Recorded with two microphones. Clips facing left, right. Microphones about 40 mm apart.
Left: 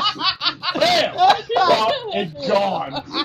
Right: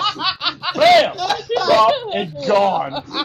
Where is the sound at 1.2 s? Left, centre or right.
Left.